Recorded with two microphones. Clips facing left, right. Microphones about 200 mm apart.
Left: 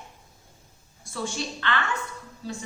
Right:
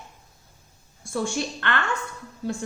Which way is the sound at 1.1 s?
55° right (ahead or behind).